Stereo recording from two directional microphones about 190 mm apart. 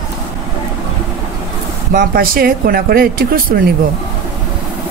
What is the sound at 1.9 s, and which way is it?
Speech, 50° right (ahead or behind).